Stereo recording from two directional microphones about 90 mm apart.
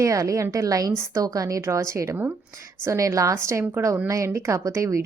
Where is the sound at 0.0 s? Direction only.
35° right (ahead or behind).